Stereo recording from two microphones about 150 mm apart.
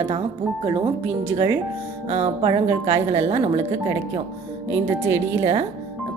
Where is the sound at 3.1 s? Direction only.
45° right (ahead or behind).